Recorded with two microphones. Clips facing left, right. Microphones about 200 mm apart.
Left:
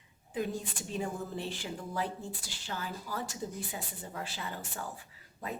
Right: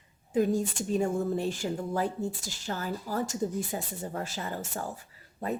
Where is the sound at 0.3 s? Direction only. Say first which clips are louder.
Right 9 dB; 45° right (ahead or behind).